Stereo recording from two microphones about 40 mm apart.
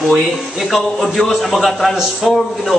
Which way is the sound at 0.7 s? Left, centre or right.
Centre.